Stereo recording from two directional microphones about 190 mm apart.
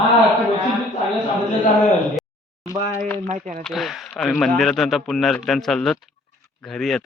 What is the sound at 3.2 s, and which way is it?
Speech, 40° right (ahead or behind).